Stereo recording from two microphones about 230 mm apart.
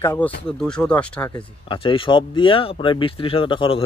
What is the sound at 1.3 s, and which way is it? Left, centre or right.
Speech, left.